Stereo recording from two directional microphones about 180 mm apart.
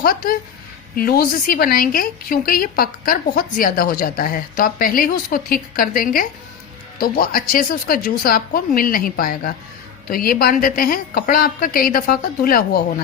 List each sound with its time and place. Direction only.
0.0 s speech: 55° left (ahead or behind)